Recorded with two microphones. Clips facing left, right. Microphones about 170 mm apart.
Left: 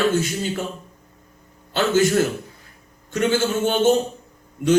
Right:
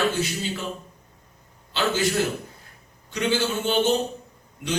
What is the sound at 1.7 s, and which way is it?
A man's voice, 50° left (ahead or behind).